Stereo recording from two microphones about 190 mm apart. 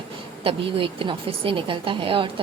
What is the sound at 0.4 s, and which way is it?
A woman's voice, 30° right (ahead or behind).